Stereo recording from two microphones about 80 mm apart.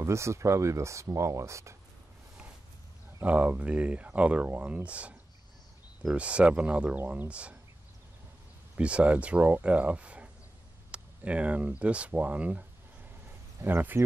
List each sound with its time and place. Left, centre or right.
0.0 s speech: right
3.2 s speech: centre
8.7 s speech: centre